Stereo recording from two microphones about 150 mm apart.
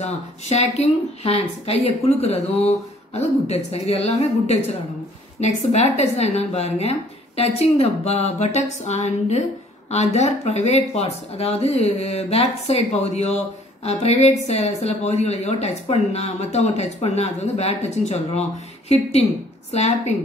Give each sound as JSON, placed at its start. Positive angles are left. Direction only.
{"t": 0.0, "sound": "speech", "side_deg": 45}
{"t": 19.7, "sound": "speech", "side_deg": 45}